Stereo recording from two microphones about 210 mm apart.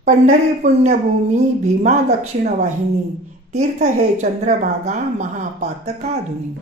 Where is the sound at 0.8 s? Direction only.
35° right (ahead or behind).